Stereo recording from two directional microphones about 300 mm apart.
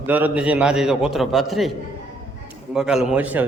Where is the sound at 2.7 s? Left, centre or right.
Centre.